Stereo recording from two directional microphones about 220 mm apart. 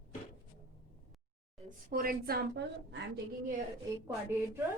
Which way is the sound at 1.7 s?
40° right (ahead or behind).